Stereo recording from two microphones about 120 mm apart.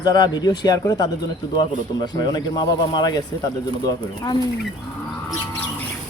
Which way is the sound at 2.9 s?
35° left (ahead or behind).